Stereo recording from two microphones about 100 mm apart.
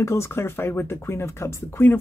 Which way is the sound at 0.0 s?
25° left (ahead or behind).